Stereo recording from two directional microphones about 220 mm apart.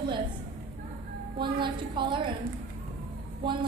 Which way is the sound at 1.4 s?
20° right (ahead or behind).